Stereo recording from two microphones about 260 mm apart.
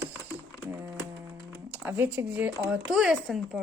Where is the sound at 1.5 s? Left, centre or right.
Centre.